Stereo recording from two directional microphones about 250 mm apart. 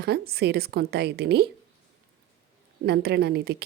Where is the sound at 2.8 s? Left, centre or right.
Right.